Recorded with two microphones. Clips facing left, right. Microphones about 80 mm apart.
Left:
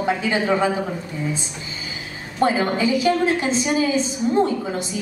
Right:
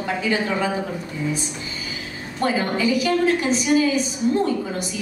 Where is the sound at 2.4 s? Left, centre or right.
Left.